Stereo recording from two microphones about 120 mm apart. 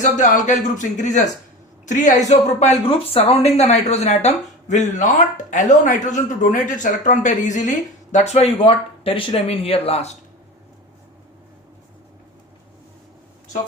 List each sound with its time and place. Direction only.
0.0 s speech: 90° left
8.1 s speech: 65° left (ahead or behind)